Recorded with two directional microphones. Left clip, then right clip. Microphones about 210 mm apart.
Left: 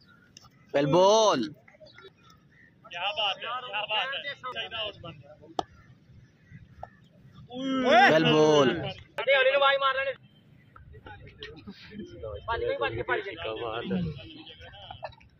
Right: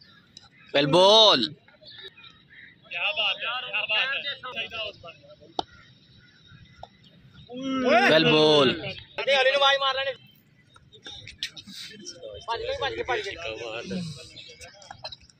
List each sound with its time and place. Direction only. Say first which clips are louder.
0.7 s a man's voice: right 3 dB; 5° left (ahead or behind)
2.9 s vehicle: right 3 dB; 50° right (ahead or behind)
3.3 s a man's voice: right 4 dB; 35° left (ahead or behind)
3.7 s speech: right 4 dB; 50° right (ahead or behind)
7.5 s a man's voice: even; 40° right (ahead or behind)
8.1 s a man's voice: right 2 dB; 5° left (ahead or behind)
9.2 s a man's voice: right 1 dB; 45° right (ahead or behind)
11.2 s a sound: right 11 dB; 25° left (ahead or behind)
12.4 s a man's voice: even; 40° right (ahead or behind)
13.4 s a man's voice: even; 25° left (ahead or behind)